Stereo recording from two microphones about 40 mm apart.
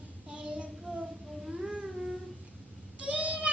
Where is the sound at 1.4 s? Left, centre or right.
Centre.